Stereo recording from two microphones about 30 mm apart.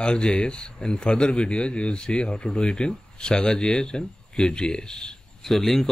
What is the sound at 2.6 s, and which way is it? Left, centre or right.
Speech, left.